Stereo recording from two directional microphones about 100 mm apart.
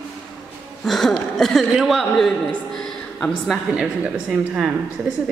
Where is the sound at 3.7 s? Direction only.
10° right (ahead or behind).